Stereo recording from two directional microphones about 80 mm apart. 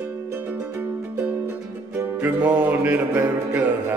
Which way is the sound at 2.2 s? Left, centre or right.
Centre.